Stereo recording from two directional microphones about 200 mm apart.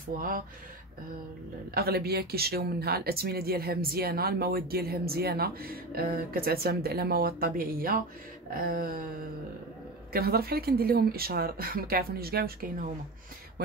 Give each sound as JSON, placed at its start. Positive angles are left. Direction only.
{"t": 0.1, "sound": "speech", "side_deg": -45}
{"t": 1.7, "sound": "speech", "side_deg": -50}
{"t": 10.1, "sound": "speech", "side_deg": -50}